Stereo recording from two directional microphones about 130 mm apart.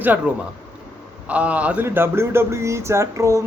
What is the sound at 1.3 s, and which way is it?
Speech, 10° right (ahead or behind).